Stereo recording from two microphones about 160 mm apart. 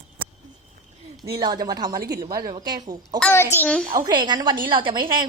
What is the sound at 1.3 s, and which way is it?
A woman's voice, 25° right (ahead or behind).